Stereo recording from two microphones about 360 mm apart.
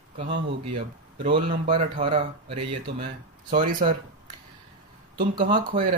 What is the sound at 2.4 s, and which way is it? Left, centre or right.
Speech, right.